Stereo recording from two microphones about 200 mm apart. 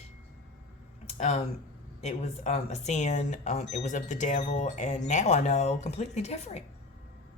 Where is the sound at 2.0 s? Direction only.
35° left (ahead or behind).